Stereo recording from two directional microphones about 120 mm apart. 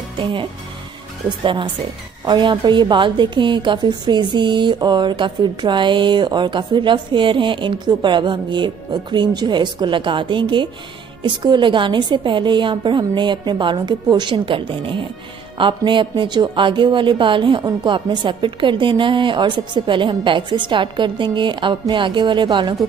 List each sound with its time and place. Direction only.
0.2 s a woman's voice: 45° right (ahead or behind)